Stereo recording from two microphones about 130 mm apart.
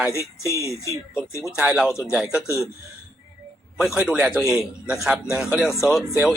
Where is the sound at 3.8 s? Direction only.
5° right (ahead or behind).